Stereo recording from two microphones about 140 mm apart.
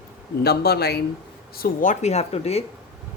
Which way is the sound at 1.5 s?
80° left.